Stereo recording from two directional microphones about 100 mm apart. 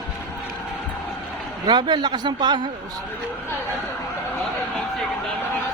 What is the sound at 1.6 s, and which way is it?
A man's voice, 50° right (ahead or behind).